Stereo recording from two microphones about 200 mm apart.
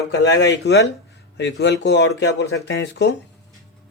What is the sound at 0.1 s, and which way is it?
A man's voice, 60° left (ahead or behind).